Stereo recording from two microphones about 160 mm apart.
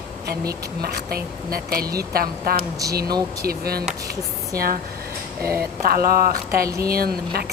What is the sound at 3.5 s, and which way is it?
Speech, 75° right (ahead or behind).